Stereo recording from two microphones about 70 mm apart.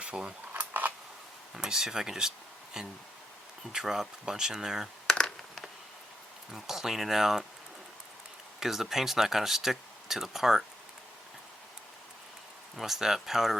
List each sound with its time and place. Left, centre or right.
0.0 s speech: centre
0.5 s a sound: right
1.5 s speech: centre
5.1 s computer keyboard: centre
6.5 s speech: centre
8.6 s speech: centre
12.7 s speech: centre